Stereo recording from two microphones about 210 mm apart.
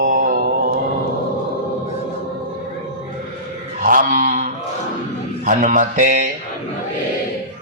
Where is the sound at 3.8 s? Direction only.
40° right (ahead or behind).